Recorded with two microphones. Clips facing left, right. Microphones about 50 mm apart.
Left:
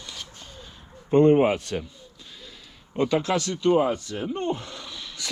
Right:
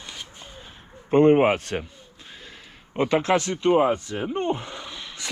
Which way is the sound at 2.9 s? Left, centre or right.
Right.